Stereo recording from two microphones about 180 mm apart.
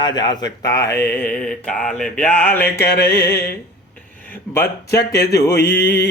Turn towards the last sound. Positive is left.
turn(degrees=15)  # may be behind; listen again after turning